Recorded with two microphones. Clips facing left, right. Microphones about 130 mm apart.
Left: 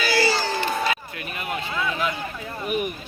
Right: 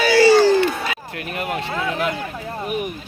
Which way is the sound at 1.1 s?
70° right (ahead or behind).